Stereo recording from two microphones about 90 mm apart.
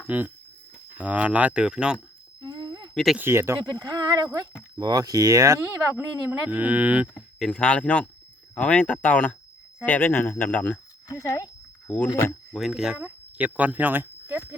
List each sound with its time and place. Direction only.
0.1 s speech: 15° right (ahead or behind)
2.4 s a sound: 50° right (ahead or behind)
2.9 s speech: centre (ahead or behind)
3.2 s speech: 30° right (ahead or behind)
3.7 s speech: 45° right (ahead or behind); by 7.1 s 15° right (ahead or behind)
7.3 s speech: 10° left (ahead or behind)
11.1 s speech: 40° left (ahead or behind)
12.0 s speech: 25° left (ahead or behind)
12.5 s speech: 5° right (ahead or behind)
13.0 s speech: 15° right (ahead or behind)